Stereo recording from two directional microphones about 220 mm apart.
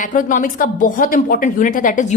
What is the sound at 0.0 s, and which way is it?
A woman's voice, 35° left (ahead or behind).